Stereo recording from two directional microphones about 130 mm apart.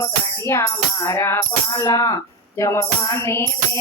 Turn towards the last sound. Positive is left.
turn(degrees=20)  # may be behind; listen again after turning